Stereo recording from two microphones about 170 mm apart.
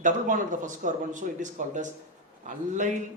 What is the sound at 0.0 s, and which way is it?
Speech, 50° right (ahead or behind).